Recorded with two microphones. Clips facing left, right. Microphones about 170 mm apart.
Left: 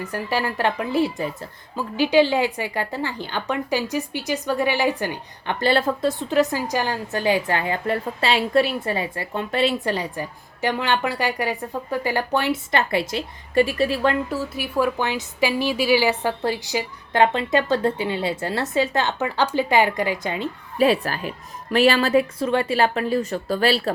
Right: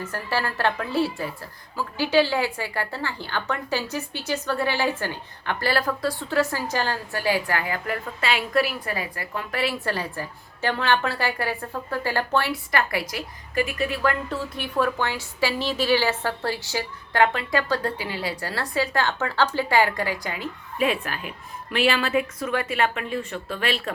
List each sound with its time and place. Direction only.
0.0 s a woman's voice: 15° left (ahead or behind)
14.3 s a woman's voice: 5° left (ahead or behind); by 23.9 s 35° left (ahead or behind)